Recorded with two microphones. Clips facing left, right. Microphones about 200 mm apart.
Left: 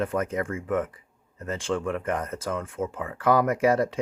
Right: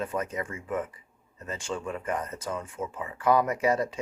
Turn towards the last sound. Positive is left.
turn(degrees=85)